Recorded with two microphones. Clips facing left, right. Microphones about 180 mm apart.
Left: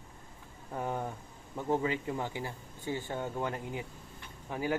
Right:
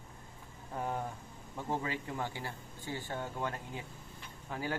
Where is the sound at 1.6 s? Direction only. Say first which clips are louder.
Left 6 dB; 20° left (ahead or behind).